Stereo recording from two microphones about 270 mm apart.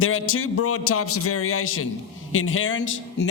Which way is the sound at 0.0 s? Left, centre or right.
Left.